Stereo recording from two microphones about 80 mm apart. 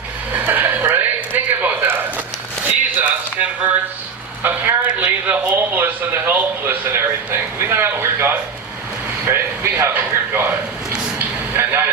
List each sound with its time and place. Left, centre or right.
0.3 s a sound: right
4.9 s a man's voice: centre
11.5 s vehicle: right